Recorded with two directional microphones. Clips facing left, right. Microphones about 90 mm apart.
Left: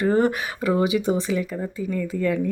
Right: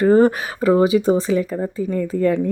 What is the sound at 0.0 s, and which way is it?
Speech, 35° right (ahead or behind).